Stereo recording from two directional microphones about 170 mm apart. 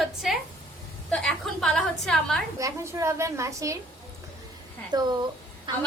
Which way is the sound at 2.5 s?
15° right (ahead or behind).